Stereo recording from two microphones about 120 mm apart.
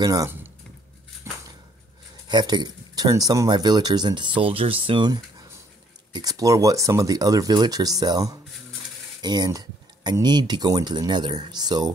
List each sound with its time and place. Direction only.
0.0 s speech: 30° right (ahead or behind)
1.3 s a sound: 25° right (ahead or behind)
2.2 s speech: 35° right (ahead or behind)